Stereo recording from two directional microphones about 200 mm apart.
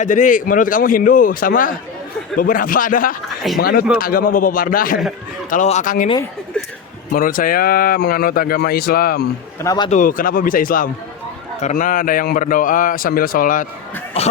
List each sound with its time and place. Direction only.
0.0 s speech: 40° left (ahead or behind)
7.1 s speech: 45° left (ahead or behind)
9.6 s a man's voice: 20° left (ahead or behind)
9.9 s speech: 40° left (ahead or behind)
14.2 s a man's voice: 30° left (ahead or behind)